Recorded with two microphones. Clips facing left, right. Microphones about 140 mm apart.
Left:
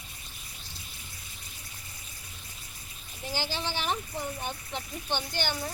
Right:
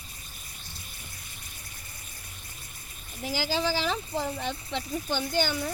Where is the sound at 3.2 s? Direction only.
90° right.